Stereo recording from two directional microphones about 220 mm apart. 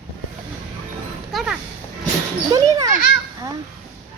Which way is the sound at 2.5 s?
15° right (ahead or behind).